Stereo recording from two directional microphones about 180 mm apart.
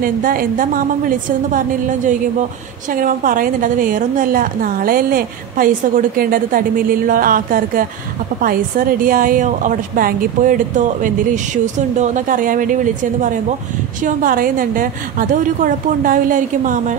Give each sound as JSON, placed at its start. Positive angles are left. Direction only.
{"t": 0.0, "sound": "a woman's voice", "side_deg": -50}